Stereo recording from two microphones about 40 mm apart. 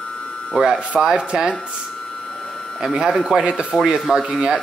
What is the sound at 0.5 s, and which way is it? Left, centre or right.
Speech, centre.